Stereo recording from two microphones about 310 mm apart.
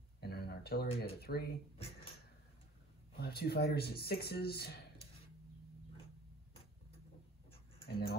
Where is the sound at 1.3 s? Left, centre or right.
Left.